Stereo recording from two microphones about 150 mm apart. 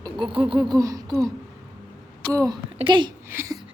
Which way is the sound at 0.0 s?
35° right (ahead or behind).